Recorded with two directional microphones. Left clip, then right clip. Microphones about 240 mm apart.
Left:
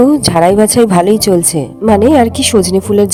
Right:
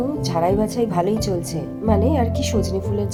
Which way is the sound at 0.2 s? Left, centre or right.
Left.